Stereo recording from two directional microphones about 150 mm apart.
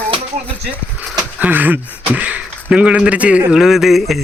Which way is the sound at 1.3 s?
10° right (ahead or behind).